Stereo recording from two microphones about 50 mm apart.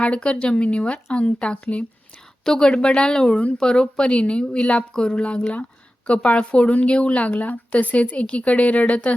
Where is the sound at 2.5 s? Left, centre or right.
Centre.